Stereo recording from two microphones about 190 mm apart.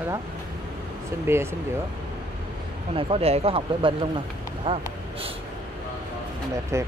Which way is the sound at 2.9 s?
30° right (ahead or behind).